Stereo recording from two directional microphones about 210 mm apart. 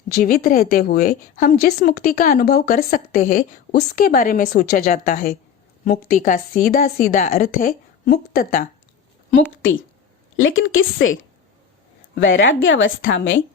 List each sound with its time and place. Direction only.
0.1 s a woman's voice: 45° left (ahead or behind)
10.3 s a woman's voice: 70° left (ahead or behind)
12.2 s a woman's voice: 65° left (ahead or behind)